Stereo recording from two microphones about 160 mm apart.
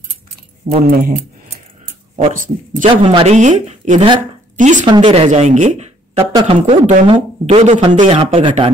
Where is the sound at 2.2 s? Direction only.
55° right (ahead or behind).